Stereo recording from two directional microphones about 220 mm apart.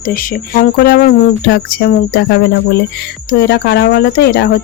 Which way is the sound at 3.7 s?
50° left (ahead or behind).